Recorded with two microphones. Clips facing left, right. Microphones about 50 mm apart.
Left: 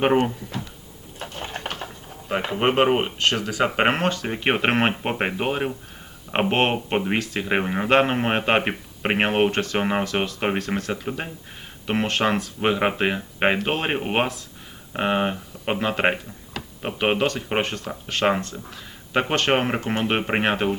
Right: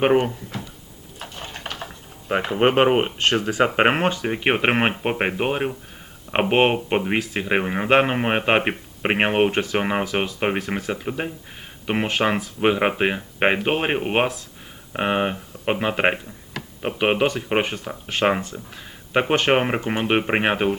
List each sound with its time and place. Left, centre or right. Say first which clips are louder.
0.0 s speech: right 1 dB; centre
1.2 s a sound: left 3 dB; centre
2.8 s speech: right 2 dB; centre
3.2 s speech: right 2 dB; right
3.8 s speech: right 2 dB; centre